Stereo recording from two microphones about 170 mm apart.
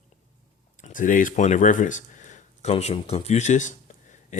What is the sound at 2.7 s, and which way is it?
A man's voice, 35° left (ahead or behind).